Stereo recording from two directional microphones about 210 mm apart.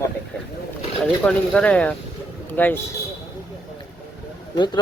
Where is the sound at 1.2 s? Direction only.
5° left (ahead or behind).